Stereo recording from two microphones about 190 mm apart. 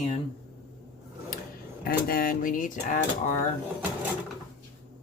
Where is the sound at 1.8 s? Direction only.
50° left (ahead or behind).